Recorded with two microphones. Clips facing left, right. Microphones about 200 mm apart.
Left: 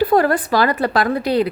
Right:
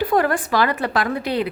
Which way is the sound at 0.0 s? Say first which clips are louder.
Left 4 dB; 35° left (ahead or behind).